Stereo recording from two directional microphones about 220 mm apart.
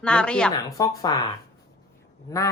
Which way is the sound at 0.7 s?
15° left (ahead or behind).